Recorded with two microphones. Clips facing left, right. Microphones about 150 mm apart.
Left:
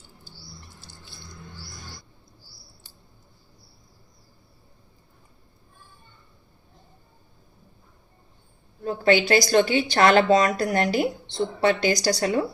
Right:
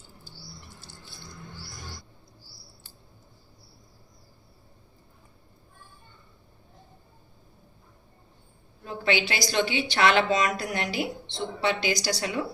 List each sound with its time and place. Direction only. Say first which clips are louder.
8.8 s a woman's voice: left 7 dB; 45° left (ahead or behind)